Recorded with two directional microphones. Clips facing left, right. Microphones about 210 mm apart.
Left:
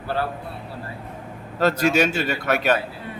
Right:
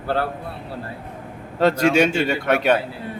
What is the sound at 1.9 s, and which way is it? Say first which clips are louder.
Speech: right 3 dB; 30° right (ahead or behind).